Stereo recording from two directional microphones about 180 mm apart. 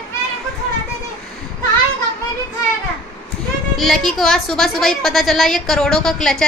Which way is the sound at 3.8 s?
Centre (ahead or behind).